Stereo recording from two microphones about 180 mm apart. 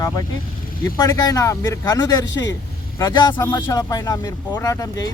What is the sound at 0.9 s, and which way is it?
Speech, 20° left (ahead or behind).